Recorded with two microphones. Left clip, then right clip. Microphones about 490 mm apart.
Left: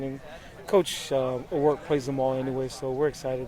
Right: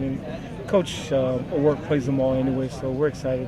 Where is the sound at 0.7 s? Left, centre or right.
Left.